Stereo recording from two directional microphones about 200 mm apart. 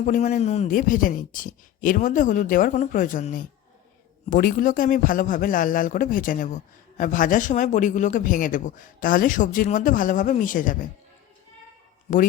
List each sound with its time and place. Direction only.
0.0 s a man's voice: 35° left (ahead or behind)